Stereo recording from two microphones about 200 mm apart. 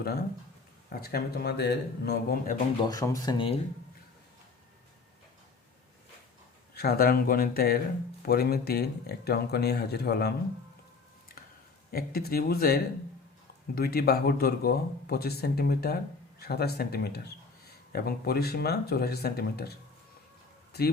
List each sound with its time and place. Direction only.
0.0 s speech: 50° left (ahead or behind)
2.8 s speech: 15° left (ahead or behind)
6.7 s speech: 50° left (ahead or behind)
11.9 s speech: 50° left (ahead or behind)